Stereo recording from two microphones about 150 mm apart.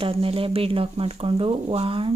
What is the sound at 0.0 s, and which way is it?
Speech, 40° right (ahead or behind).